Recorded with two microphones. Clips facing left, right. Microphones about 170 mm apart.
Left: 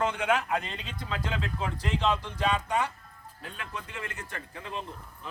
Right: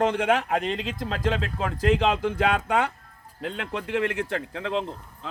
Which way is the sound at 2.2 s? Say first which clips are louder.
Right 6 dB; 65° right (ahead or behind).